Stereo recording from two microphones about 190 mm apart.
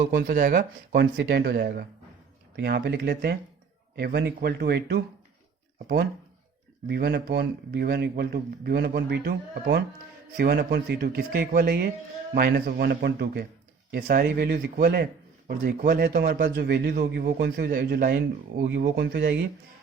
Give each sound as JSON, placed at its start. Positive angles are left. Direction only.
{"t": 0.3, "sound": "a man's voice", "side_deg": -50}
{"t": 6.8, "sound": "a man's voice", "side_deg": -55}